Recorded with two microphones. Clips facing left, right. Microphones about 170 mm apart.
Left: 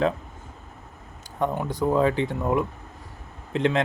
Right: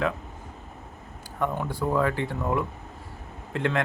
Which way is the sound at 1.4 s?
20° left (ahead or behind).